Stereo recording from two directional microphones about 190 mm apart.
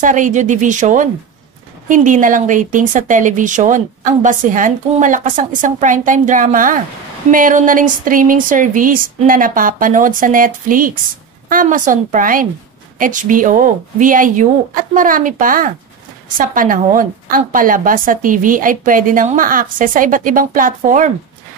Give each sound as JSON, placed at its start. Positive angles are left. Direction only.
{"t": 0.0, "sound": "speech", "side_deg": -40}